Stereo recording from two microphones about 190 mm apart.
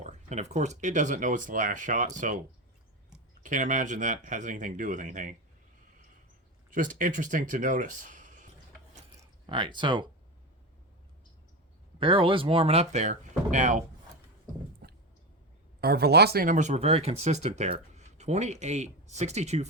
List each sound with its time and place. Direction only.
0.0 s speech: 40° right (ahead or behind)
3.4 s speech: 40° right (ahead or behind)
6.7 s speech: 45° right (ahead or behind)
9.2 s speech: 25° right (ahead or behind)
11.9 s speech: 25° right (ahead or behind)
14.8 s clicking: 55° right (ahead or behind)
15.8 s speech: 55° right (ahead or behind); by 19.6 s 35° right (ahead or behind)